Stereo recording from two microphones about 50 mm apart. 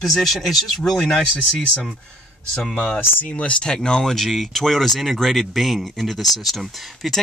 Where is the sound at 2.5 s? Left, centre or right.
Centre.